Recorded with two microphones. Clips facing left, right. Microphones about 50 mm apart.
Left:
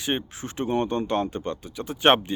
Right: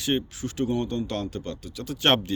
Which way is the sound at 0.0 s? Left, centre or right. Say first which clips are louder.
Right 2 dB; left.